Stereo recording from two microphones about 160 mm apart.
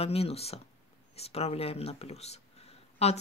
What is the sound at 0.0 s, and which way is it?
Speech, 40° left (ahead or behind).